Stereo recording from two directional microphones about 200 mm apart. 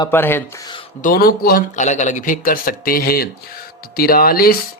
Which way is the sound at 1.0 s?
45° left (ahead or behind).